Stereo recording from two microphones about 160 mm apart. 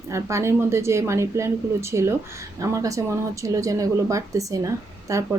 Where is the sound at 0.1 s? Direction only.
15° right (ahead or behind).